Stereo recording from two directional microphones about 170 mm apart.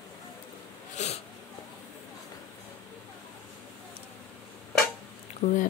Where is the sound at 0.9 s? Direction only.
40° left (ahead or behind).